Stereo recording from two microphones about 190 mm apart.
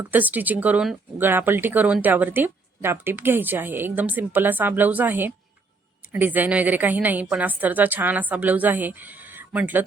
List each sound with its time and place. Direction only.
0.1 s speech: 10° right (ahead or behind)